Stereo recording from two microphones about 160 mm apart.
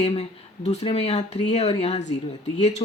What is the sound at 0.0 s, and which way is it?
Speech, 40° left (ahead or behind).